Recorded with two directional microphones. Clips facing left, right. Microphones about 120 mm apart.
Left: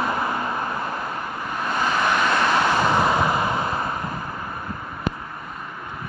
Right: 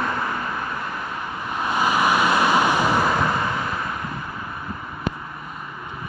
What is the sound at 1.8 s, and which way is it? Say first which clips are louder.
Vehicle: right 2 dB; 10° right (ahead or behind).